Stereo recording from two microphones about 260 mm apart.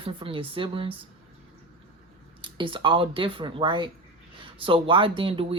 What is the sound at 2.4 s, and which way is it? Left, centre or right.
Speech, centre.